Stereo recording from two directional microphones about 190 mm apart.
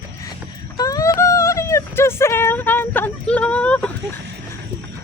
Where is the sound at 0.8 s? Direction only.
20° left (ahead or behind).